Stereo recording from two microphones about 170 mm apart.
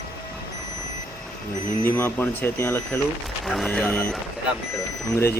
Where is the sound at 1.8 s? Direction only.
15° left (ahead or behind).